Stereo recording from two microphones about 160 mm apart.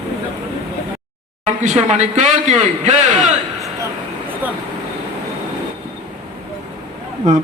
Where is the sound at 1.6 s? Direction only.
45° right (ahead or behind).